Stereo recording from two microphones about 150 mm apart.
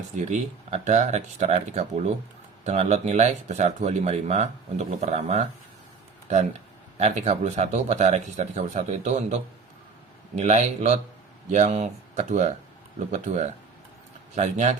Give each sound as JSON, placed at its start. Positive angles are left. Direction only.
{"t": 0.2, "sound": "speech", "side_deg": -50}
{"t": 7.0, "sound": "speech", "side_deg": -50}